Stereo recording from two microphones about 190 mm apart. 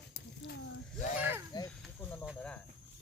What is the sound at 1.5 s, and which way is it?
Snake, 20° left (ahead or behind).